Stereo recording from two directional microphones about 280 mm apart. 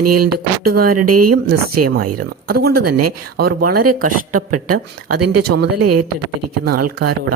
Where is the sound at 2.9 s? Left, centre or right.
Right.